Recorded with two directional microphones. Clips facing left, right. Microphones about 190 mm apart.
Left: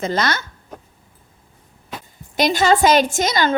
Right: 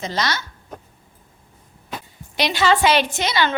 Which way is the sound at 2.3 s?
45° left (ahead or behind).